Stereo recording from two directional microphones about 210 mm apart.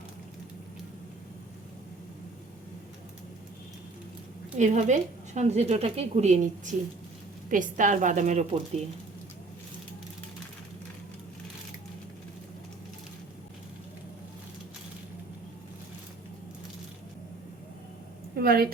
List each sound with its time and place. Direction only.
4.5 s a woman's voice: 35° right (ahead or behind)
18.3 s a woman's voice: 45° right (ahead or behind)